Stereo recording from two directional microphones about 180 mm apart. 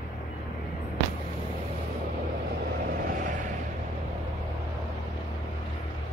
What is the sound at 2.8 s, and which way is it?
Vehicle, 50° right (ahead or behind).